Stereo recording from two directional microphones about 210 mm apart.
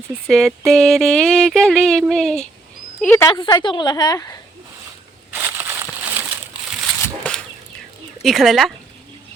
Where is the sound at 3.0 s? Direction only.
15° left (ahead or behind).